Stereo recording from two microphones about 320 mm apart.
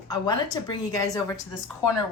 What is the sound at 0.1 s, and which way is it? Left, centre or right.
Speech, centre.